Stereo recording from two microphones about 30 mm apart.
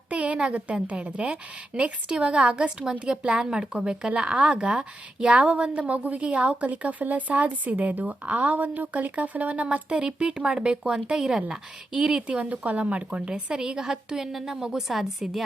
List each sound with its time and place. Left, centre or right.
0.1 s a woman's voice: right
5.8 s a woman's voice: right
6.1 s a woman's voice: right
6.7 s speech: right
9.0 s speech: right
9.9 s a woman's voice: right
12.5 s speech: right
12.8 s a woman's voice: right
13.6 s a woman's voice: right
14.8 s a woman's voice: centre